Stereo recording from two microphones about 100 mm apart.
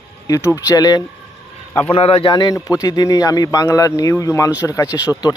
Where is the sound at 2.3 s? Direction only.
45° left (ahead or behind).